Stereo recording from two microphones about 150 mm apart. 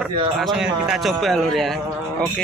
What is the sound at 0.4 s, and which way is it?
A man's voice, 5° right (ahead or behind).